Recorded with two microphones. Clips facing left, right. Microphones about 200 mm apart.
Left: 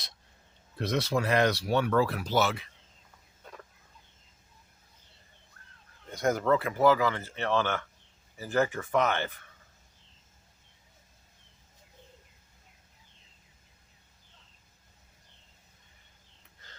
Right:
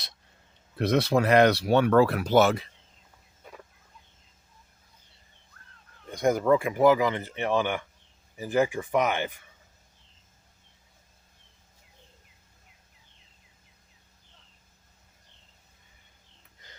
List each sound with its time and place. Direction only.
0.8 s speech: 60° right (ahead or behind)
3.4 s fowl: 10° right (ahead or behind)
6.1 s speech: 15° right (ahead or behind)